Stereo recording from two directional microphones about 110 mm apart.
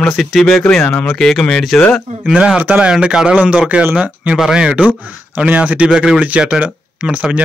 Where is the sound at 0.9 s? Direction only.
15° left (ahead or behind).